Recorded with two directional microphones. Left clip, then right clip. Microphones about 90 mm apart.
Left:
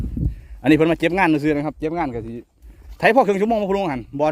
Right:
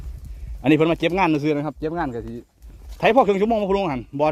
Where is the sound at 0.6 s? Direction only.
55° left (ahead or behind).